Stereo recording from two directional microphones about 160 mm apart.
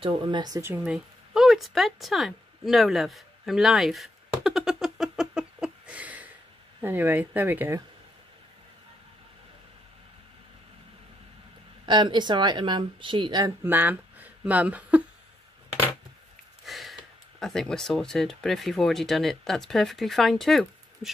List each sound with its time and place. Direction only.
0.0 s speech: 30° right (ahead or behind)
0.8 s a sound: 5° right (ahead or behind)
6.8 s speech: 10° right (ahead or behind)
11.8 s speech: 30° right (ahead or behind)
13.7 s speech: 10° right (ahead or behind)
16.6 s a sound: centre (ahead or behind)
17.4 s speech: centre (ahead or behind)